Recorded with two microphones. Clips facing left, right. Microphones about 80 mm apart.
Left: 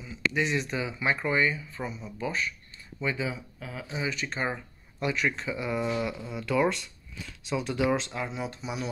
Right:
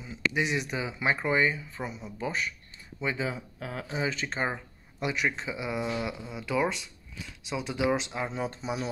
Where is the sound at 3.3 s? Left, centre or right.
Right.